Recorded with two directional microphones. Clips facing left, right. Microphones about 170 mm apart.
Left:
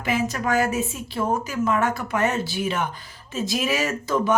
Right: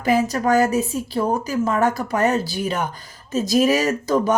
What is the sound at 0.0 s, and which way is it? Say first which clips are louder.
Speech: right 5 dB; 40° right (ahead or behind).